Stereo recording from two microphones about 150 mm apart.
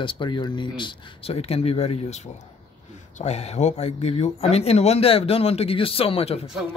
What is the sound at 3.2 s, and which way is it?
Speech, 45° left (ahead or behind).